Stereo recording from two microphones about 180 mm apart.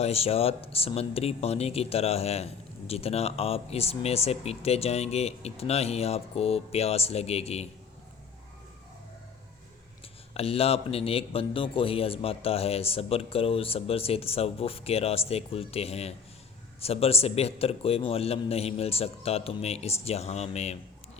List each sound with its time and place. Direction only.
0.0 s speech: 35° left (ahead or behind)
10.0 s speech: 35° left (ahead or behind)